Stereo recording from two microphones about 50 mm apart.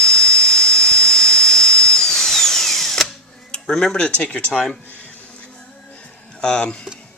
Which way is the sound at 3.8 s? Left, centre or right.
Centre.